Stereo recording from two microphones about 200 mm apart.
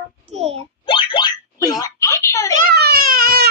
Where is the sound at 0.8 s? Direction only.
25° left (ahead or behind).